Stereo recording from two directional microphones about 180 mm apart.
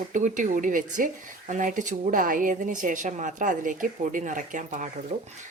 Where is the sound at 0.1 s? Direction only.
45° right (ahead or behind).